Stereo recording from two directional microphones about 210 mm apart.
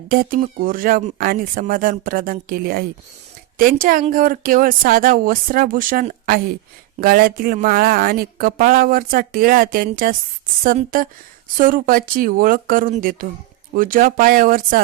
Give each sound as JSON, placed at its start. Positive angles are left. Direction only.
{"t": 0.1, "sound": "speech", "side_deg": -40}